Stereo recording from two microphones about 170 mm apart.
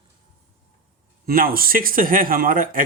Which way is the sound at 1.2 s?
60° right (ahead or behind).